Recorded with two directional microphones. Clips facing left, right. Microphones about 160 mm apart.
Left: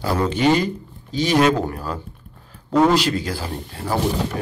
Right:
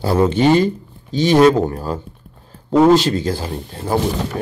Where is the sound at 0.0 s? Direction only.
25° right (ahead or behind).